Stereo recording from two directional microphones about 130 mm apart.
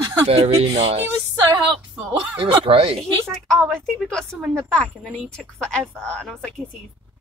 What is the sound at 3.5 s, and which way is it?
A woman's voice, 5° left (ahead or behind).